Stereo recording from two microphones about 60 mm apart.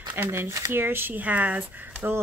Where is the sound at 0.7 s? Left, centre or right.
Right.